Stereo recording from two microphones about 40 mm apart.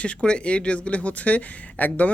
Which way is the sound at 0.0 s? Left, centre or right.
Left.